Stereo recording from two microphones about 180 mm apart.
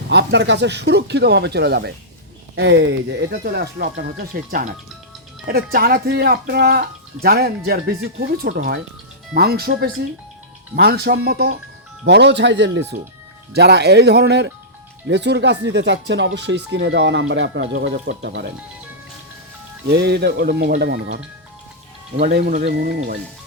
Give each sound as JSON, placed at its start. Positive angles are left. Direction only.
{"t": 0.1, "sound": "speech", "side_deg": -75}
{"t": 12.0, "sound": "speech", "side_deg": -75}
{"t": 19.9, "sound": "speech", "side_deg": -65}
{"t": 22.3, "sound": "speech", "side_deg": -65}